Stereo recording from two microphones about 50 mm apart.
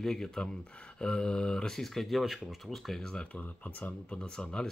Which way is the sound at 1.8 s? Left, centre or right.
Centre.